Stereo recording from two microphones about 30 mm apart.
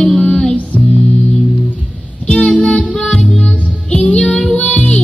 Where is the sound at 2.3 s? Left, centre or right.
Left.